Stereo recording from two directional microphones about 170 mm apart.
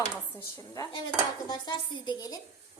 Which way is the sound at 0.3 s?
15° left (ahead or behind).